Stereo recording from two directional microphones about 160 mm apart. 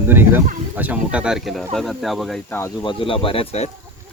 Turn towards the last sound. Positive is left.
turn(degrees=40)  # may be behind; listen again after turning